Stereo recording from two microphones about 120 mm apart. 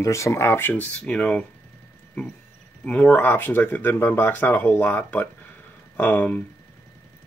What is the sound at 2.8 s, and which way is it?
Speech, 10° left (ahead or behind).